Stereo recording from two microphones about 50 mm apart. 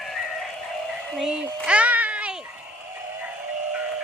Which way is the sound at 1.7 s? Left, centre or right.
Right.